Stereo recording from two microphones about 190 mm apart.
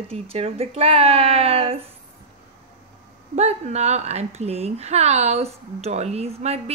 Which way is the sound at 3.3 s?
35° right (ahead or behind).